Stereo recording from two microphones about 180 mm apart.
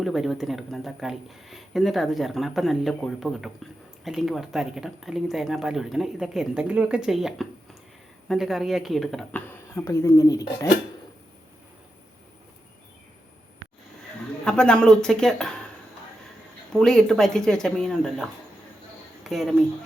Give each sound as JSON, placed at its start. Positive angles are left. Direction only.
{"t": 0.0, "sound": "speech", "side_deg": 0}
{"t": 9.5, "sound": "speech", "side_deg": 15}
{"t": 14.4, "sound": "speech", "side_deg": 5}
{"t": 16.7, "sound": "speech", "side_deg": 5}